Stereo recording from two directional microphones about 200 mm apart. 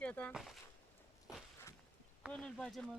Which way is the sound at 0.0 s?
5° left (ahead or behind).